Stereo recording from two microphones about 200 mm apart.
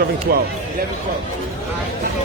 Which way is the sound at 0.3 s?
50° right (ahead or behind).